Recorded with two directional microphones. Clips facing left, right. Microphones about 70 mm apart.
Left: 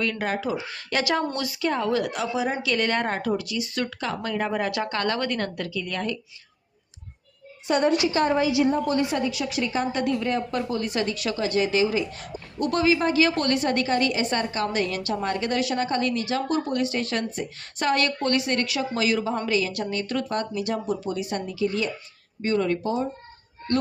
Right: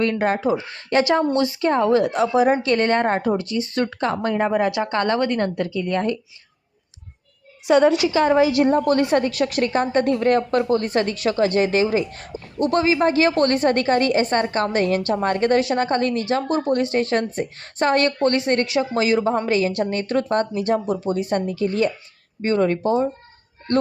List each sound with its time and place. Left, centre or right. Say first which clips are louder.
0.0 s a woman's voice: right 7 dB; right
7.7 s a woman's voice: right 6 dB; right
9.8 s a woman's voice: right 6 dB; right